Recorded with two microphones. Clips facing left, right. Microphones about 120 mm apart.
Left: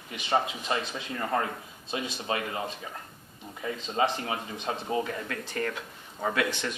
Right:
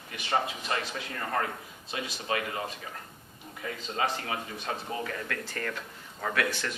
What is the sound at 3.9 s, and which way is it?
Speech, 25° left (ahead or behind).